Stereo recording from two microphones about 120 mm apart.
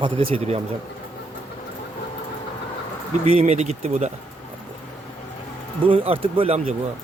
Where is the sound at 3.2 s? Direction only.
60° right (ahead or behind).